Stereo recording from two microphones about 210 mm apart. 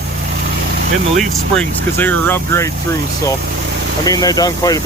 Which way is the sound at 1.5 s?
10° left (ahead or behind).